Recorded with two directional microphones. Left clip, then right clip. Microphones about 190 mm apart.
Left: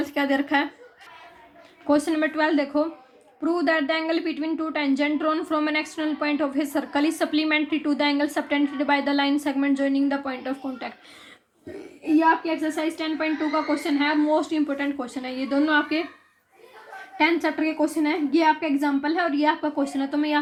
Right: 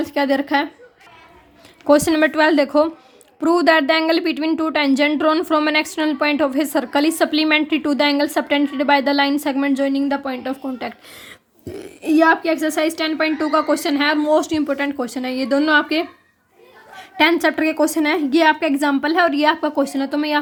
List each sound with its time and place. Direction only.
0.0 s a woman's voice: 30° right (ahead or behind)
1.9 s a woman's voice: 40° right (ahead or behind)
12.0 s a woman's voice: 50° right (ahead or behind)
17.2 s a woman's voice: 40° right (ahead or behind)